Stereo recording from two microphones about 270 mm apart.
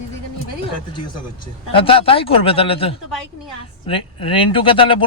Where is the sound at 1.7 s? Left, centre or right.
Centre.